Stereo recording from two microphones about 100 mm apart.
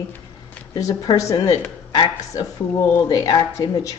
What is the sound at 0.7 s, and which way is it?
Speech, 35° left (ahead or behind).